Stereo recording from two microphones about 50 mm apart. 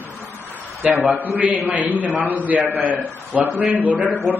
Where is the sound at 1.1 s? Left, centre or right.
Right.